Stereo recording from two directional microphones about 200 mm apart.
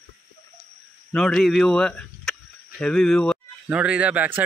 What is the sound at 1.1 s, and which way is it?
Speech, 5° left (ahead or behind).